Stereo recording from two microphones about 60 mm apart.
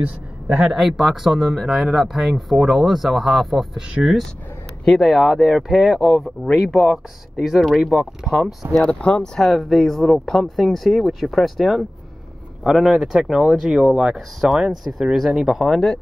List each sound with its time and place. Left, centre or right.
0.0 s a man's voice: centre
0.7 s speech: centre
4.8 s speech: centre
8.9 s speech: centre